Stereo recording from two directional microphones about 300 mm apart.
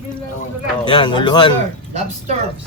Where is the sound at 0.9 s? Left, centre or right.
Centre.